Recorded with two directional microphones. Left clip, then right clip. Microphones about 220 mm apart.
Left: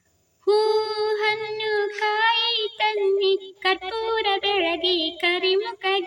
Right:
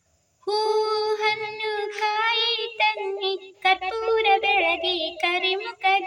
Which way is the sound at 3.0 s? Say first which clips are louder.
Left 7 dB; 10° left (ahead or behind).